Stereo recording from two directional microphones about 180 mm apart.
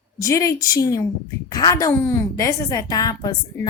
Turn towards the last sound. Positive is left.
turn(degrees=20)  # may be behind; listen again after turning